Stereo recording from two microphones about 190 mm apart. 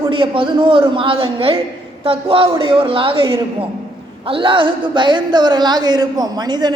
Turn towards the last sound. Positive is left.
turn(degrees=-20)  # may be behind; listen again after turning